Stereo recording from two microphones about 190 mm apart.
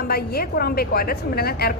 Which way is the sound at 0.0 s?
55° left (ahead or behind).